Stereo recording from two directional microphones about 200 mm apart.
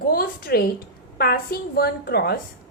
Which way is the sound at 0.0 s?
45° left (ahead or behind).